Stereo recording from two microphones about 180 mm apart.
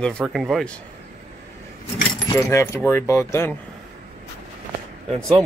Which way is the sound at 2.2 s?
15° left (ahead or behind).